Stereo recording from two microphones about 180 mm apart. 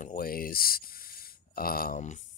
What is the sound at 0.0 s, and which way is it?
Speech, 55° left (ahead or behind).